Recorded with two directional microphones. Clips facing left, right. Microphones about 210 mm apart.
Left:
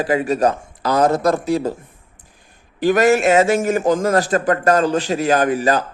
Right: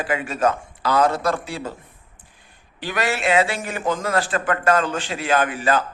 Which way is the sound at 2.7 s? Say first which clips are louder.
Left 11 dB; 45° left (ahead or behind).